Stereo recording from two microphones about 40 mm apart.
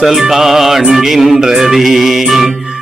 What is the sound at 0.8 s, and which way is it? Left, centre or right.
Music, centre.